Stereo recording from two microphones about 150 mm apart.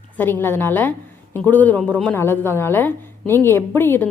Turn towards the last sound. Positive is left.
turn(degrees=15)  # may be behind; listen again after turning